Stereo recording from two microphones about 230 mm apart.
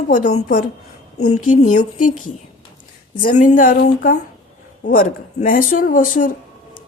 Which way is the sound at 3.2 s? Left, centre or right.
Left.